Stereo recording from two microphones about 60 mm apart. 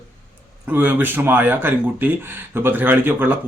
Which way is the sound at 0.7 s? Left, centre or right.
Right.